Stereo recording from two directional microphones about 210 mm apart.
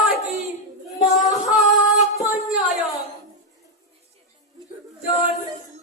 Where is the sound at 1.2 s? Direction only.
Centre (ahead or behind).